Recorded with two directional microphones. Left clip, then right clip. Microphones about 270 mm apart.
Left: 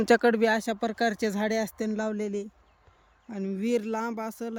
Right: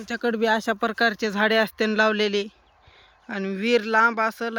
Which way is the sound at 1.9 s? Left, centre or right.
Right.